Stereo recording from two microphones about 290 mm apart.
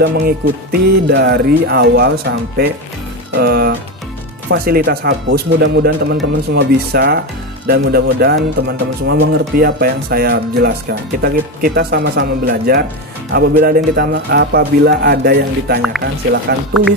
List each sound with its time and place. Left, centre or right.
0.0 s speech: right